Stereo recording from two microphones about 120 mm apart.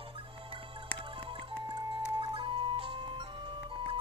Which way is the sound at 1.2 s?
45° right (ahead or behind).